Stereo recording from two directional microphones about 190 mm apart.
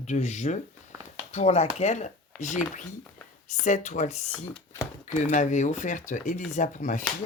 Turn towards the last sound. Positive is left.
turn(degrees=40)  # may be behind; listen again after turning